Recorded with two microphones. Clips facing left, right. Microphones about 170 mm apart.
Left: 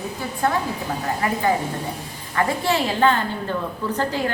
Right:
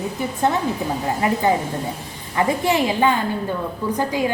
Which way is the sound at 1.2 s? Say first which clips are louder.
Right 2 dB; 20° right (ahead or behind).